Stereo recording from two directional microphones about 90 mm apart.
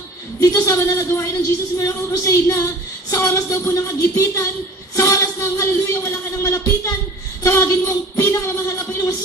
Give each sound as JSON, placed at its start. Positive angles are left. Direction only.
{"t": 0.4, "sound": "a woman's voice", "side_deg": 40}